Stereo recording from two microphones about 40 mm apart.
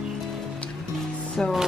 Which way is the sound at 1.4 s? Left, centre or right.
Left.